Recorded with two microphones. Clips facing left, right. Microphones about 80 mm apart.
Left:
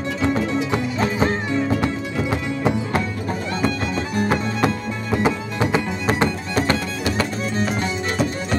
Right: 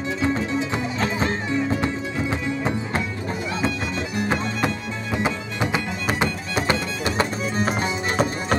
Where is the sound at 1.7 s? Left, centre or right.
Right.